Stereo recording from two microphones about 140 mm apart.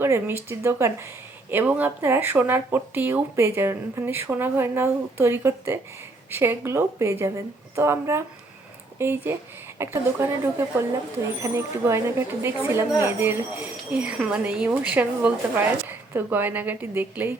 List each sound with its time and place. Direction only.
0.0 s a woman's voice: 15° right (ahead or behind)